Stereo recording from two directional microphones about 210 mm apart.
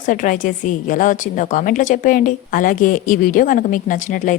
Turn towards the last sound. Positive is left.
turn(degrees=40)  # may be behind; listen again after turning